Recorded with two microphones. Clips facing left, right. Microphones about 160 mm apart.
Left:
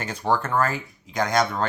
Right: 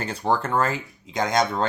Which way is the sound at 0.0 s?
30° right (ahead or behind).